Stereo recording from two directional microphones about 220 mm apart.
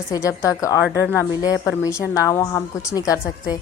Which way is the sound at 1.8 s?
15° left (ahead or behind).